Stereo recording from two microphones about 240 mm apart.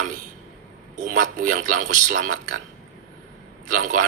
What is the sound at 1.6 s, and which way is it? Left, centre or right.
Speech, right.